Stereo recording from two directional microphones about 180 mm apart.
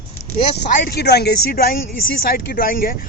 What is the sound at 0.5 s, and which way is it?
Speech, 65° left (ahead or behind).